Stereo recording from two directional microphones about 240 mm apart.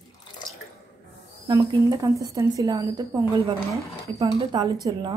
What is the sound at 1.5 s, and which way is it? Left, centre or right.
A woman's voice, centre.